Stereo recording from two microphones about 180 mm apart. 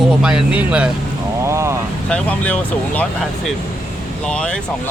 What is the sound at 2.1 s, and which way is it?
Speech, 5° left (ahead or behind).